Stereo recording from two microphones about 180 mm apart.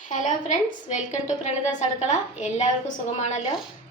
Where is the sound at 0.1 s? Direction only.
45° left (ahead or behind).